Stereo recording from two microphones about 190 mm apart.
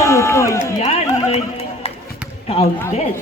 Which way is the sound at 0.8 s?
35° left (ahead or behind).